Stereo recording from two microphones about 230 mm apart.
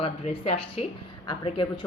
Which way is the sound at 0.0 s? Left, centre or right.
Left.